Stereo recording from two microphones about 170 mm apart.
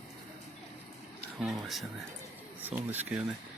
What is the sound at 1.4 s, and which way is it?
Speech, centre (ahead or behind).